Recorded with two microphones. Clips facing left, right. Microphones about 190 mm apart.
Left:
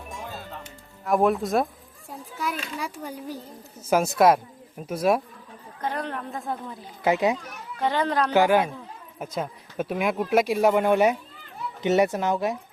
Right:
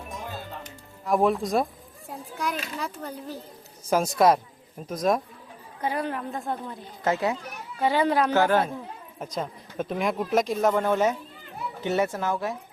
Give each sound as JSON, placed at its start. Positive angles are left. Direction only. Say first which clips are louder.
{"t": 0.6, "sound": "music", "louder": "even", "side_deg": 0}
{"t": 2.0, "sound": "speech", "louder": "even", "side_deg": 5}
{"t": 5.8, "sound": "a woman's voice", "louder": "right 2 dB", "side_deg": -10}
{"t": 7.0, "sound": "speech", "louder": "left 3 dB", "side_deg": 15}
{"t": 7.8, "sound": "speech", "louder": "right 2 dB", "side_deg": -10}
{"t": 8.3, "sound": "speech", "louder": "left 2 dB", "side_deg": 10}